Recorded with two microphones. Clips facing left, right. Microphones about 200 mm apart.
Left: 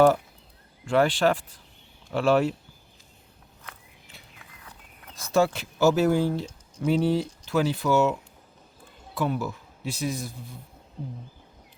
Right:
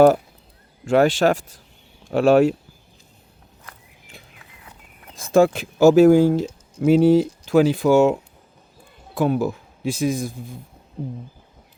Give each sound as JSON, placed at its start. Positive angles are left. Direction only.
{"t": 0.9, "sound": "speech", "side_deg": -45}
{"t": 5.1, "sound": "speech", "side_deg": -50}